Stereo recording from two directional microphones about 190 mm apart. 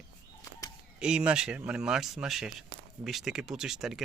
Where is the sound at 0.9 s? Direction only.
5° right (ahead or behind).